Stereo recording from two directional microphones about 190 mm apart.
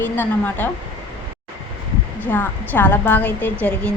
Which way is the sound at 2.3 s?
10° left (ahead or behind).